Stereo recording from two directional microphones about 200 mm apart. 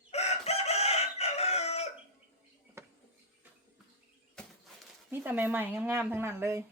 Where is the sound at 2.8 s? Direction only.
15° right (ahead or behind).